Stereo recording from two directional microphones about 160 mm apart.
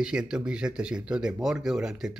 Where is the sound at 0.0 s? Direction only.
5° right (ahead or behind).